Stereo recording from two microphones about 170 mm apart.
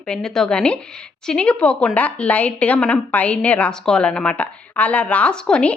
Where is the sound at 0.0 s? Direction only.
5° left (ahead or behind).